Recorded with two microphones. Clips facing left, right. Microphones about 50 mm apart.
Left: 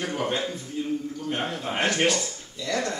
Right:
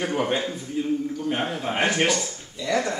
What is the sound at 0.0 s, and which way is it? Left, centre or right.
Speech, centre.